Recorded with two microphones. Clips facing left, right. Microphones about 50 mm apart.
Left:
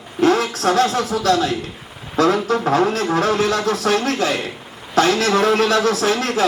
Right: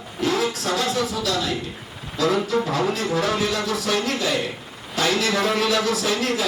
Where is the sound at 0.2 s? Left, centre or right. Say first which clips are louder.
Left 6 dB; left.